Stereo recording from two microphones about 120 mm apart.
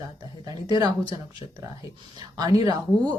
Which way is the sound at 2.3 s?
30° right (ahead or behind).